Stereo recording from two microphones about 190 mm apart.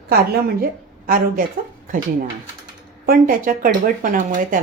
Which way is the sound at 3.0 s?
50° right (ahead or behind).